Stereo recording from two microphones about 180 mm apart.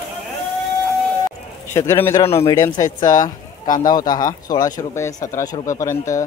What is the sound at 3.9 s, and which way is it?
Speech, 20° left (ahead or behind).